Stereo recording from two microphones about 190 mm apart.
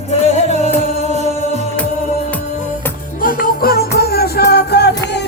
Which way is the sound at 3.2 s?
50° left (ahead or behind).